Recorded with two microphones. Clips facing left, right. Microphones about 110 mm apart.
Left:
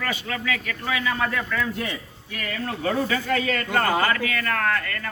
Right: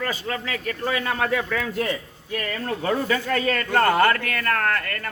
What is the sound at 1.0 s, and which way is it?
Speech, 70° right (ahead or behind).